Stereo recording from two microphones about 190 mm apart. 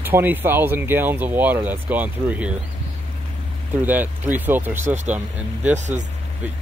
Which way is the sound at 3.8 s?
10° right (ahead or behind).